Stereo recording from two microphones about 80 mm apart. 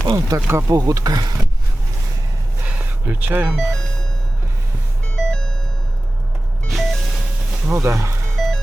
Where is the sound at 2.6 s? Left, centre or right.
Right.